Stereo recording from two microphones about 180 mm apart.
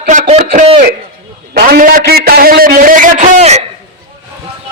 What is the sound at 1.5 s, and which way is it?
A man's voice, 55° right (ahead or behind).